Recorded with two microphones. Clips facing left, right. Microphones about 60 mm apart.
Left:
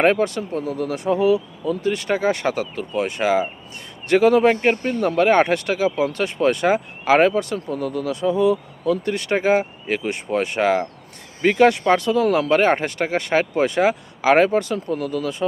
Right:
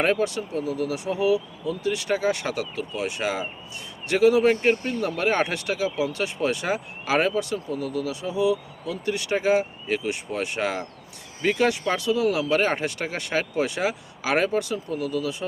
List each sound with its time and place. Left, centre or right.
0.0 s speech: left